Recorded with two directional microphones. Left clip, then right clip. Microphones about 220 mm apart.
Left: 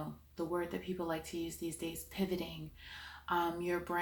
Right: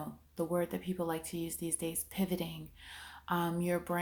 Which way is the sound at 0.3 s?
45° right (ahead or behind).